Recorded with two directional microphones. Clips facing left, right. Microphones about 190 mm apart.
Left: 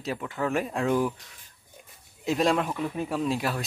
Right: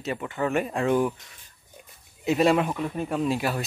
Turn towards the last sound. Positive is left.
turn(degrees=0)  # may be behind; listen again after turning